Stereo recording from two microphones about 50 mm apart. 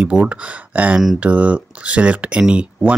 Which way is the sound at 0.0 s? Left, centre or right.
Right.